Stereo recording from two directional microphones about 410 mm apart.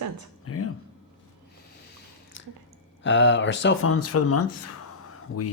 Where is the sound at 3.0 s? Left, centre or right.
Left.